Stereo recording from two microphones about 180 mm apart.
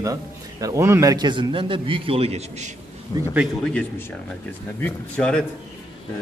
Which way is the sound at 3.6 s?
5° left (ahead or behind).